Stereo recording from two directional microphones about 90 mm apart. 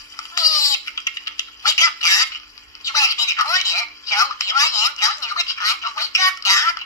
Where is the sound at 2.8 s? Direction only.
40° left (ahead or behind).